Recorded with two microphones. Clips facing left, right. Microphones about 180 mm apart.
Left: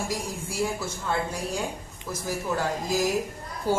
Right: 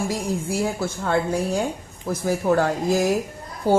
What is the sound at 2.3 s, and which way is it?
Speech, 65° right (ahead or behind).